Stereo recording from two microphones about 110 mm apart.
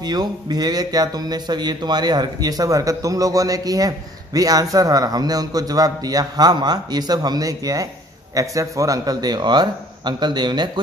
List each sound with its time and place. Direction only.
0.0 s speech: 40° right (ahead or behind)